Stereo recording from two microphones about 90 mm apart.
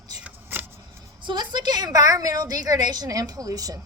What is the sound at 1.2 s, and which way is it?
A woman's voice, 55° right (ahead or behind).